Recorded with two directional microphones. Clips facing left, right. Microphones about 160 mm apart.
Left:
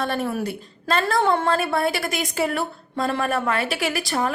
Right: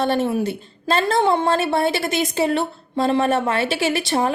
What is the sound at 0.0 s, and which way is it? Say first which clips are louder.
A woman's voice: right 5 dB; 30° right (ahead or behind).